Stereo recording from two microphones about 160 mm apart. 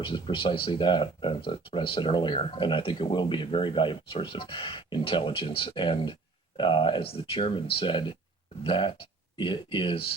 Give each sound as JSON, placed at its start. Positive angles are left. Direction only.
{"t": 0.0, "sound": "speech", "side_deg": 30}